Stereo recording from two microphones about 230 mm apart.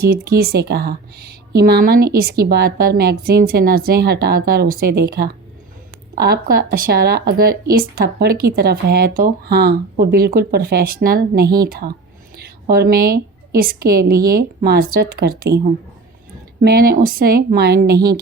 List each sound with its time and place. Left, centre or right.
0.0 s speech: right
16.6 s speech: right